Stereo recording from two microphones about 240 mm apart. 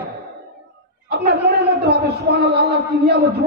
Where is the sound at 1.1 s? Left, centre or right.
Right.